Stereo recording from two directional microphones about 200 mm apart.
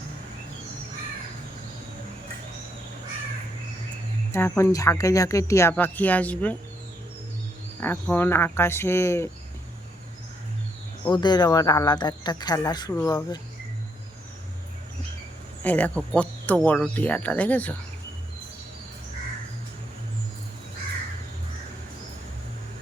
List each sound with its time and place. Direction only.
4.3 s speech: 10° left (ahead or behind)
7.8 s speech: 10° left (ahead or behind)
11.0 s speech: 20° left (ahead or behind)
15.6 s speech: 5° left (ahead or behind)